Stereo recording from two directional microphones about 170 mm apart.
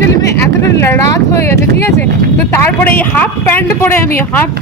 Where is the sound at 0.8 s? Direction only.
15° left (ahead or behind).